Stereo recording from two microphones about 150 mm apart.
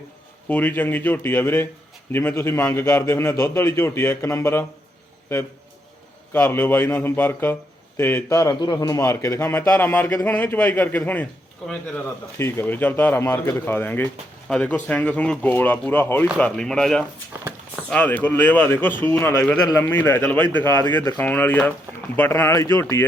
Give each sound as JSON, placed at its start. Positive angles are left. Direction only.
{"t": 0.4, "sound": "a man's voice", "side_deg": 10}
{"t": 6.3, "sound": "a man's voice", "side_deg": 15}
{"t": 8.4, "sound": "a man's voice", "side_deg": 30}
{"t": 12.4, "sound": "a man's voice", "side_deg": 15}